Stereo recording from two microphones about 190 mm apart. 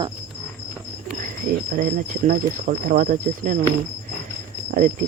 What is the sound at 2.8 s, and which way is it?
Cricket, 45° right (ahead or behind).